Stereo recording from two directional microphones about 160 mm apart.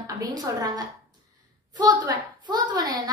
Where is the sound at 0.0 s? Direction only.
25° right (ahead or behind).